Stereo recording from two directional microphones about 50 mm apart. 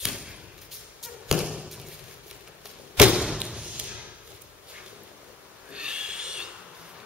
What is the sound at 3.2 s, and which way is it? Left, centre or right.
Thump, centre.